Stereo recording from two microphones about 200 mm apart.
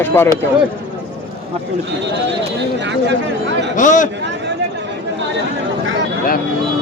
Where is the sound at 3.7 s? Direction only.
40° left (ahead or behind).